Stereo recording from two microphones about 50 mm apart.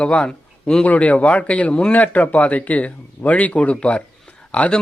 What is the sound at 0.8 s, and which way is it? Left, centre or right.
Speech, left.